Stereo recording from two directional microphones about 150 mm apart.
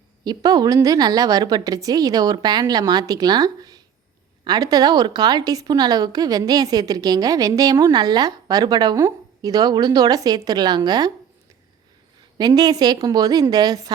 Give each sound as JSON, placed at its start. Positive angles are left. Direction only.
{"t": 0.3, "sound": "a woman's voice", "side_deg": -25}
{"t": 12.4, "sound": "a woman's voice", "side_deg": -25}